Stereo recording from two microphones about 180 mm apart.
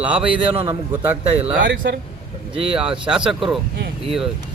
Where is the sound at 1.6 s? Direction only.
75° right (ahead or behind).